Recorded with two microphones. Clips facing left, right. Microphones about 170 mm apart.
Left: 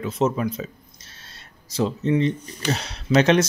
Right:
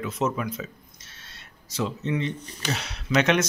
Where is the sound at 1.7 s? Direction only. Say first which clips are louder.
Left 6 dB; 35° left (ahead or behind).